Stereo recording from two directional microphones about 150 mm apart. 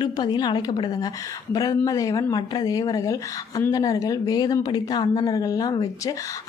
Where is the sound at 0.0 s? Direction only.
30° left (ahead or behind).